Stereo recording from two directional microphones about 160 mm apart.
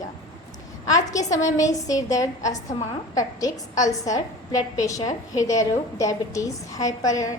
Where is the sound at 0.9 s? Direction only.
20° left (ahead or behind).